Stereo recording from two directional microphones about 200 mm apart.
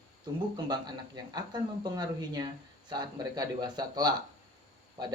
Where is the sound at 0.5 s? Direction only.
20° right (ahead or behind).